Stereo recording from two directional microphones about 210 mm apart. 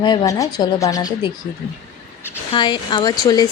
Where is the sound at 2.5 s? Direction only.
20° left (ahead or behind).